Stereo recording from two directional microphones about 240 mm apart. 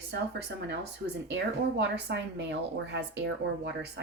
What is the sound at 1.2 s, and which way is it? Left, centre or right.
Speech, right.